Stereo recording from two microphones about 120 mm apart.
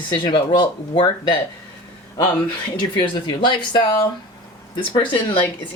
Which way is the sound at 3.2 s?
40° left (ahead or behind).